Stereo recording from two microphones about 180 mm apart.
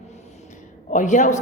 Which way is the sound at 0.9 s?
40° left (ahead or behind).